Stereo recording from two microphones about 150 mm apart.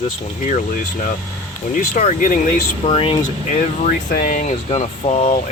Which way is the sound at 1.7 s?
60° left (ahead or behind).